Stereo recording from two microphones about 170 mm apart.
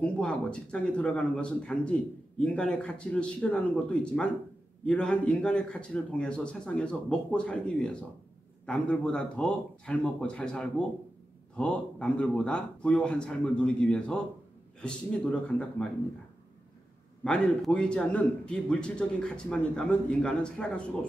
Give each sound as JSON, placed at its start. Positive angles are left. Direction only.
{"t": 0.0, "sound": "a man's voice", "side_deg": 5}
{"t": 15.4, "sound": "a man's voice", "side_deg": 5}
{"t": 17.2, "sound": "a man's voice", "side_deg": 5}